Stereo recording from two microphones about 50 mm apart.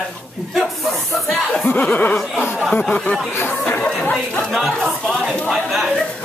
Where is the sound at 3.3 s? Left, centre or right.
Left.